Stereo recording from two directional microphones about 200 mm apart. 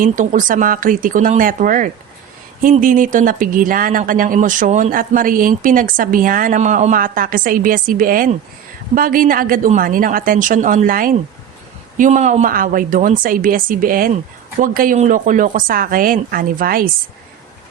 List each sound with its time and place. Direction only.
0.0 s speech: 40° right (ahead or behind)